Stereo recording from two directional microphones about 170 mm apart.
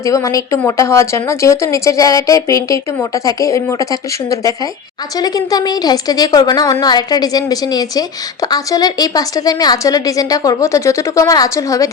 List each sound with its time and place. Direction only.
0.0 s a woman's voice: 20° left (ahead or behind)